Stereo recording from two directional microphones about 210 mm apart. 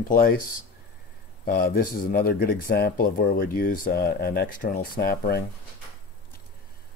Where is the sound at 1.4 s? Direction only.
45° left (ahead or behind).